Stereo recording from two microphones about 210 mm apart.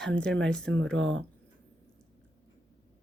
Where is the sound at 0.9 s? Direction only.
60° right (ahead or behind).